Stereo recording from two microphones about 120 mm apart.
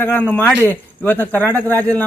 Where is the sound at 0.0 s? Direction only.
15° left (ahead or behind).